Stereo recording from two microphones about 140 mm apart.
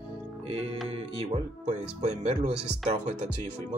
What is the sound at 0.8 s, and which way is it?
Speech, 40° right (ahead or behind).